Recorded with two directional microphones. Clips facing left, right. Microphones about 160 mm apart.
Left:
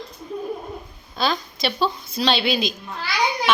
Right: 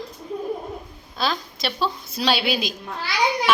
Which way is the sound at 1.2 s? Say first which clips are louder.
Left 2 dB; centre (ahead or behind).